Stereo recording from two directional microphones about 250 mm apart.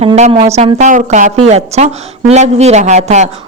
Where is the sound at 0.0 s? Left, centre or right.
Right.